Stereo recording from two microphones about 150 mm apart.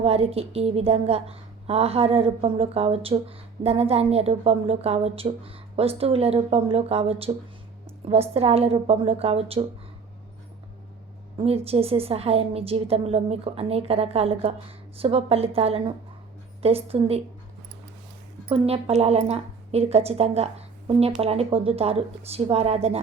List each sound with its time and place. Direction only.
0.0 s a woman's voice: 40° right (ahead or behind)
11.4 s a woman's voice: 40° right (ahead or behind)
18.4 s a woman's voice: 40° right (ahead or behind)